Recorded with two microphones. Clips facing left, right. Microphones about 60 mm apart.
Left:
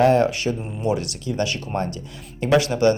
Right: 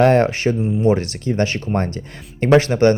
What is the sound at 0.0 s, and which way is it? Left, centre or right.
Speech, right.